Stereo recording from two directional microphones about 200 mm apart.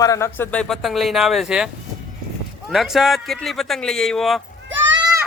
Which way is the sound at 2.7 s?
Centre (ahead or behind).